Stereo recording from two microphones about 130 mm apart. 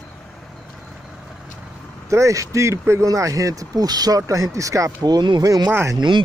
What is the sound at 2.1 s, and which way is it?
Speech, 25° right (ahead or behind).